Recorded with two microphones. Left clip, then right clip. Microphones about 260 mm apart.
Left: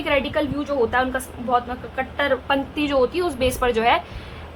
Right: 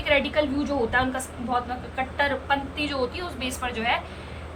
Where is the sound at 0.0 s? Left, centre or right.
Centre.